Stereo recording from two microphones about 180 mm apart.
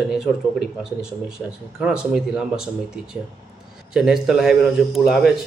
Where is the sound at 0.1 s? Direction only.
5° right (ahead or behind).